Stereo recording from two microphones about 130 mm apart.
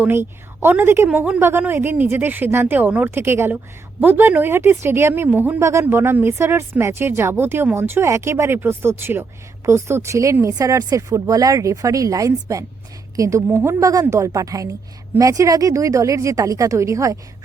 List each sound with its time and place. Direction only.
0.0 s speech: 15° right (ahead or behind)